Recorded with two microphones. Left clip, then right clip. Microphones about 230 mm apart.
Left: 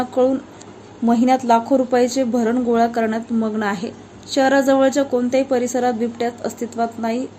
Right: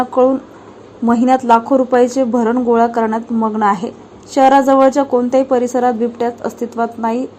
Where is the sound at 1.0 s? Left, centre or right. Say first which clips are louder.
Right 4 dB; centre.